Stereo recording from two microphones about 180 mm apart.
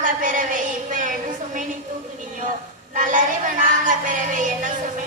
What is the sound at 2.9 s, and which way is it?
Child singing, 45° right (ahead or behind).